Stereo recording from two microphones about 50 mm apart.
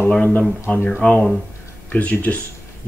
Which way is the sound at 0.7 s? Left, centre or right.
Left.